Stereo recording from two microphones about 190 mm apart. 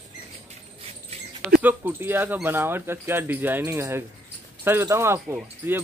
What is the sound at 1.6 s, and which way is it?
Speech, 10° right (ahead or behind).